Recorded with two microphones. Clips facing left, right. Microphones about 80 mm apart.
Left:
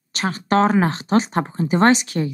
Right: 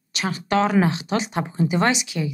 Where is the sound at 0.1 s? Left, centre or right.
Left.